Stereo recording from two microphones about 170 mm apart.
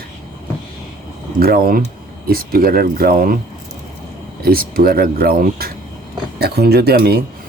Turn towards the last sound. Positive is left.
turn(degrees=-65)  # may be behind; listen again after turning